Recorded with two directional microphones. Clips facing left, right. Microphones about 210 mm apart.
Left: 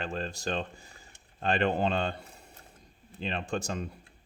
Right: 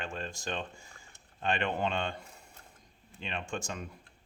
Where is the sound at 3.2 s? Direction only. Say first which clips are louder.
Left 5 dB; 35° left (ahead or behind).